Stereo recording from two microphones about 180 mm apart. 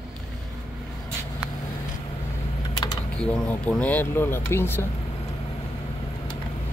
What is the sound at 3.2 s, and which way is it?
Speech, 5° left (ahead or behind).